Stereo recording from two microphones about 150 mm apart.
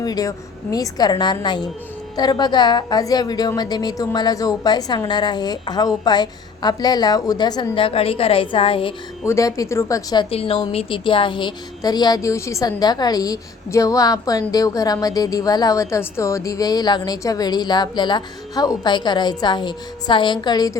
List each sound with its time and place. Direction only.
0.0 s a woman's voice: 25° left (ahead or behind)
9.2 s a woman's voice: 20° left (ahead or behind)
10.2 s a woman's voice: 40° left (ahead or behind)